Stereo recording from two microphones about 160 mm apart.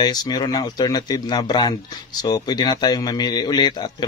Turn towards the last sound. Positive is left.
turn(degrees=25)  # may be behind; listen again after turning